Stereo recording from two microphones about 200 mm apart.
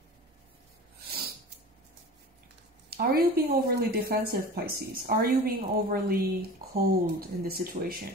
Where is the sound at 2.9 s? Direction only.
50° right (ahead or behind).